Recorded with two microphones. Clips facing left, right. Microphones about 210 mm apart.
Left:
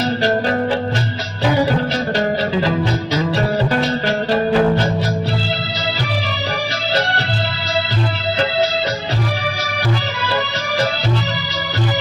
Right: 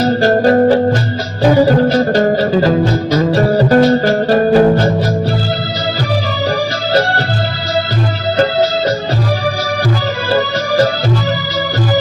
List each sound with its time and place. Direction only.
0.0 s music: 45° right (ahead or behind)